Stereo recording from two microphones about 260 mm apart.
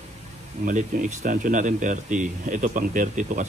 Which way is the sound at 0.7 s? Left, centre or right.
Right.